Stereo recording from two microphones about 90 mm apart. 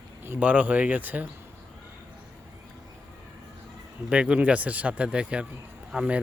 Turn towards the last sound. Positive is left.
turn(degrees=-10)  # may be behind; listen again after turning